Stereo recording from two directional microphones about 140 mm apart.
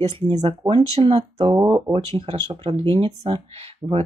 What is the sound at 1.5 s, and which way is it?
Speech, 25° right (ahead or behind).